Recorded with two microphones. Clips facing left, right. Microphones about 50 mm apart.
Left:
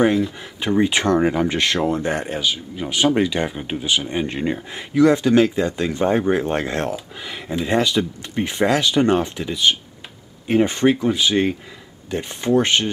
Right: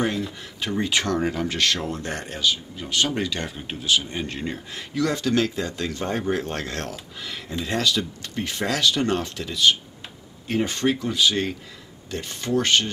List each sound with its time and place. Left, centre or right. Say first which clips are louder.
0.4 s speech: left 8 dB; centre